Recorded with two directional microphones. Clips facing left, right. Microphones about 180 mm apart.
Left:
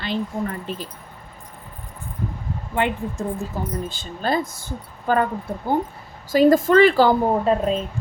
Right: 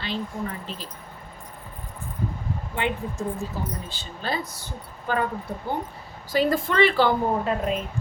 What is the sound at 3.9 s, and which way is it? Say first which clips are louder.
Speech: left 6 dB; 45° left (ahead or behind).